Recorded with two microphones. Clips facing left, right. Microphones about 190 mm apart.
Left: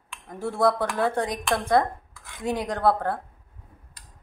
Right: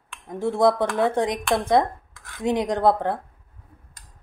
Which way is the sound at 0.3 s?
20° right (ahead or behind).